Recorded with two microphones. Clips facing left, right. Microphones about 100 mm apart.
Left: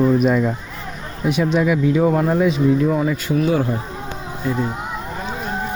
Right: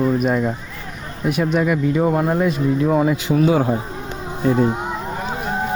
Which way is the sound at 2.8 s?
20° right (ahead or behind).